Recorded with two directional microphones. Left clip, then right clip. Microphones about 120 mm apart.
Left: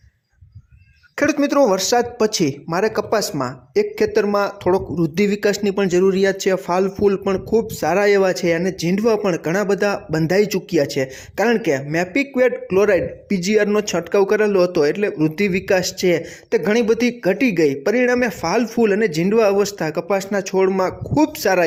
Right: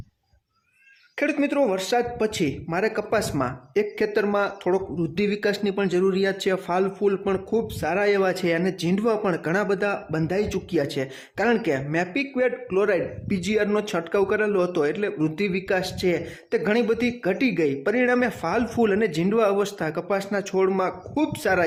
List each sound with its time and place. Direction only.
1.1 s speech: 30° left (ahead or behind)
3.9 s speech: 30° left (ahead or behind)
12.1 s speech: 35° left (ahead or behind)
18.7 s speech: 20° left (ahead or behind)